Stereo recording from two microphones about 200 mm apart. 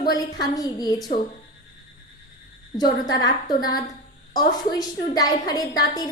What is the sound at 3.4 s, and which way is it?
Speech, 20° left (ahead or behind).